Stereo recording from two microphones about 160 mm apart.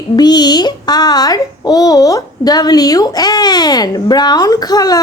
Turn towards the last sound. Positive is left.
turn(degrees=25)  # may be behind; listen again after turning